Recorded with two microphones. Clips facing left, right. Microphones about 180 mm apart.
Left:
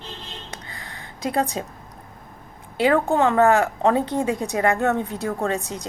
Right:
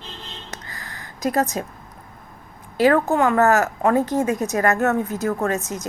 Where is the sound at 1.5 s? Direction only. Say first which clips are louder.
Right 2 dB; 20° left (ahead or behind).